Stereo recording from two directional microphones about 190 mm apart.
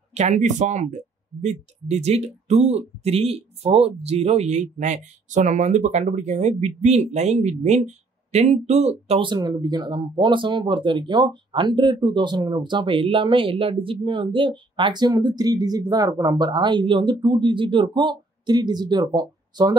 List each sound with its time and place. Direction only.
0.1 s speech: 40° right (ahead or behind); by 19.7 s 20° right (ahead or behind)